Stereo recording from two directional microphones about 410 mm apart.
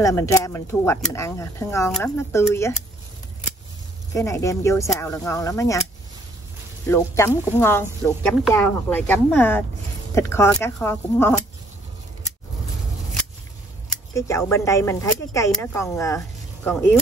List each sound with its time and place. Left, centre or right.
0.0 s speech: centre
4.1 s speech: centre
6.9 s speech: centre
13.8 s speech: centre